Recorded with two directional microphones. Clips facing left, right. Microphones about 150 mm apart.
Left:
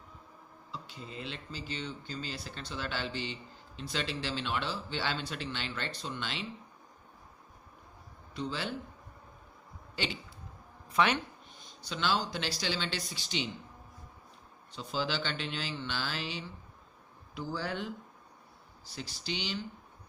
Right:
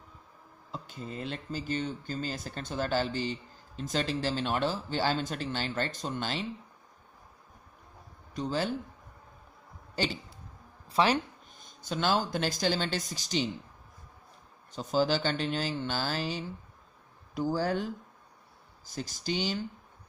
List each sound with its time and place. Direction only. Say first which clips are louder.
0.7 s speech: right 5 dB; 45° right (ahead or behind)
8.4 s speech: right 5 dB; 45° right (ahead or behind)
10.0 s speech: right 5 dB; 40° right (ahead or behind)
11.6 s speech: right 4 dB; 45° right (ahead or behind)
14.7 s speech: right 7 dB; 45° right (ahead or behind)